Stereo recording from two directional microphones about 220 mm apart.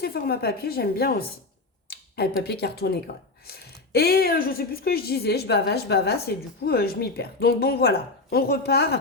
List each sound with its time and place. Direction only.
0.0 s speech: 45° left (ahead or behind)